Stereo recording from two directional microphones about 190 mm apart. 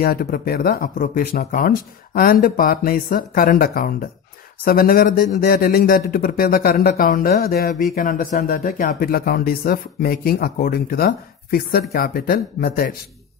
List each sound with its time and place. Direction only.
0.0 s speech: 50° left (ahead or behind)